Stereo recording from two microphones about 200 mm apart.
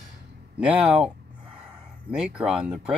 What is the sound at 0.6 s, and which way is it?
Speech, 5° right (ahead or behind).